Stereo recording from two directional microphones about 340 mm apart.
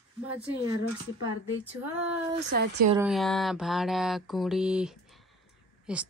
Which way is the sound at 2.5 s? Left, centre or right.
Right.